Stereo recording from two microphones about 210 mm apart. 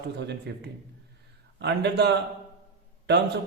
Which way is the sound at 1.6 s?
55° right (ahead or behind).